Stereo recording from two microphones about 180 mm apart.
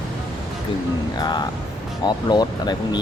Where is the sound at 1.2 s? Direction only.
25° left (ahead or behind).